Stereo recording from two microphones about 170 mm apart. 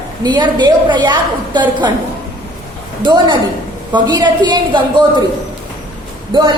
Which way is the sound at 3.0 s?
25° right (ahead or behind).